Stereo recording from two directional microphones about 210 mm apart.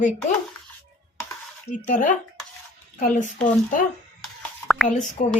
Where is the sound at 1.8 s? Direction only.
40° left (ahead or behind).